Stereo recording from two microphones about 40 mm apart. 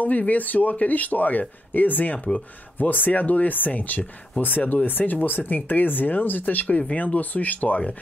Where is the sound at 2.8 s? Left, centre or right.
Left.